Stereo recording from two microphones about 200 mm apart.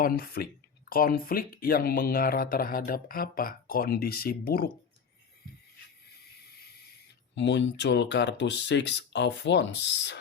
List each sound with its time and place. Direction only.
0.0 s speech: 50° left (ahead or behind)
7.3 s speech: 65° left (ahead or behind)